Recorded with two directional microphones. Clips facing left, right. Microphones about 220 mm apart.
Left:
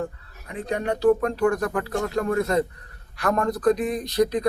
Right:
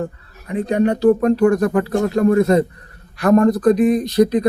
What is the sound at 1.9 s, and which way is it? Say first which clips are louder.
Speech: right 9 dB; 25° right (ahead or behind).